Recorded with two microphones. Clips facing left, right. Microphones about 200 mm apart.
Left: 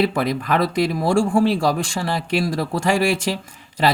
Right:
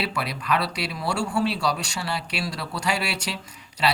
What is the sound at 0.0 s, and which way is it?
Speech, 50° left (ahead or behind).